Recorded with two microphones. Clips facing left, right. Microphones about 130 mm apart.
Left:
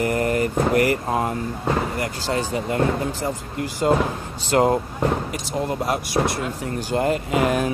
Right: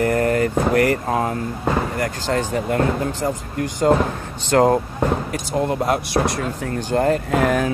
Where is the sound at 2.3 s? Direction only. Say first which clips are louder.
Right 2 dB; 15° left (ahead or behind).